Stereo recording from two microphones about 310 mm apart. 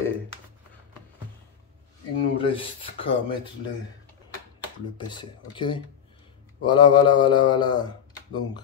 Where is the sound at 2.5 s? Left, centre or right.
Centre.